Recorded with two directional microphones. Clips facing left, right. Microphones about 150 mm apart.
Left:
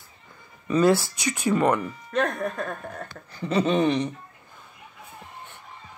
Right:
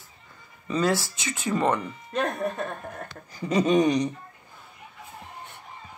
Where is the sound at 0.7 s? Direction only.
15° left (ahead or behind).